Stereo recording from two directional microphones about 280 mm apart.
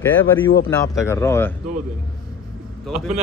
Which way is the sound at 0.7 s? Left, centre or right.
Centre.